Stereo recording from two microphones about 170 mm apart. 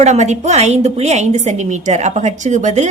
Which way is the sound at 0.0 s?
45° right (ahead or behind).